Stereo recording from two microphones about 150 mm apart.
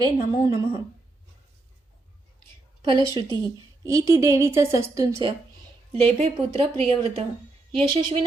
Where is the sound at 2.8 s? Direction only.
30° right (ahead or behind).